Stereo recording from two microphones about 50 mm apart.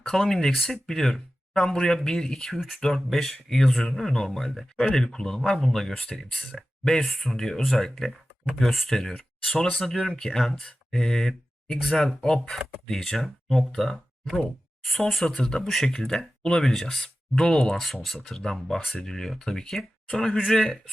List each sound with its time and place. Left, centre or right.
0.0 s speech: centre